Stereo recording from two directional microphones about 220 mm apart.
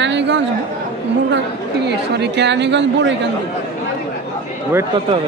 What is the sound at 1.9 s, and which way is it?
A man's voice, 50° right (ahead or behind).